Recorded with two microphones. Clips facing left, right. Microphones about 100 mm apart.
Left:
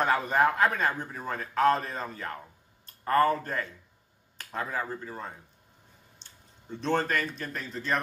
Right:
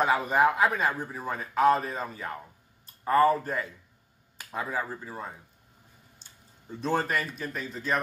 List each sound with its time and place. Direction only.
0.0 s a man's voice: 5° right (ahead or behind)
6.2 s a sound: 5° right (ahead or behind)
6.7 s a man's voice: 5° right (ahead or behind)